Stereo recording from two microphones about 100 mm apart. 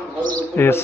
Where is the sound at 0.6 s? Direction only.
25° left (ahead or behind).